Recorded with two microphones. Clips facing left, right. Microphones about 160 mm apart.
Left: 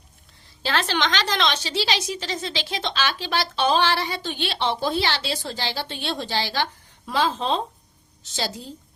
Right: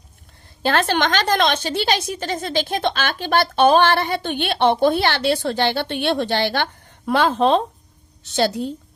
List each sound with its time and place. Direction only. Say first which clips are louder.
0.6 s a woman's voice: right 5 dB; 50° right (ahead or behind)